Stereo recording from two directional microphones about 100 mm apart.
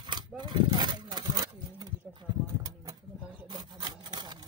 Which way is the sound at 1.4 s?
45° right (ahead or behind).